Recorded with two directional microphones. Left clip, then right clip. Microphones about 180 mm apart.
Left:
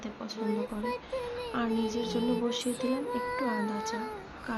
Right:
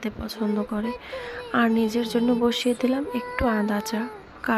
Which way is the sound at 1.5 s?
35° right (ahead or behind).